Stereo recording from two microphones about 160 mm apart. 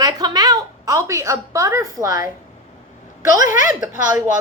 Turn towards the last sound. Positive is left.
turn(degrees=-20)  # may be behind; listen again after turning